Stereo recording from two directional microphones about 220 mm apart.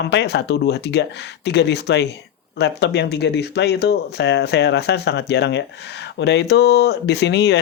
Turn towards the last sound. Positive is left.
turn(degrees=50)  # may be behind; listen again after turning